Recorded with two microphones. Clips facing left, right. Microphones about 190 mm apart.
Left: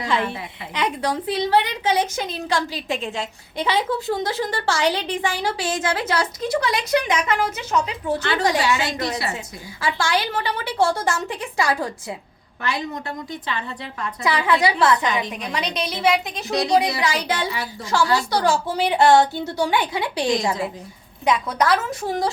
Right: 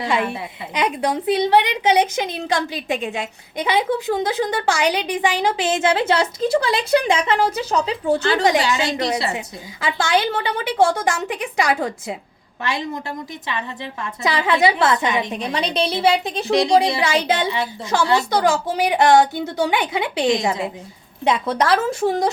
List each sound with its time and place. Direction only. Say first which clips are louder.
0.1 s a woman's voice: even; 15° right (ahead or behind)